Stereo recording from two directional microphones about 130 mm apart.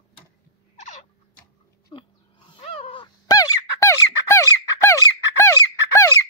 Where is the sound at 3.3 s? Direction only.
25° left (ahead or behind).